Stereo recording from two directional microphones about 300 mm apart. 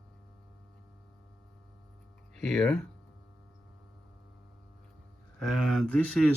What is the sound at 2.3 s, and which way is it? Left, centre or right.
Speech, centre.